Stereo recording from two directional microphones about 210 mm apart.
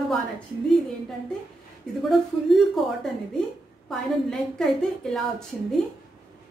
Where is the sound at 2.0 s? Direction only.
Centre (ahead or behind).